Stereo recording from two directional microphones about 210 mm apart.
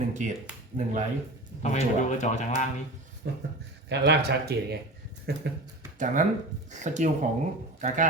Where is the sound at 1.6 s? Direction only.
35° left (ahead or behind).